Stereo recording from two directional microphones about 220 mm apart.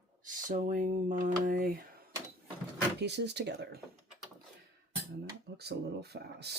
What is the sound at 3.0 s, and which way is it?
Speech, 50° right (ahead or behind).